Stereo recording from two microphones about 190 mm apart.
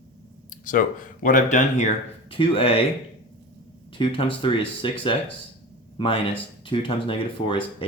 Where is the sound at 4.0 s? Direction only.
25° left (ahead or behind).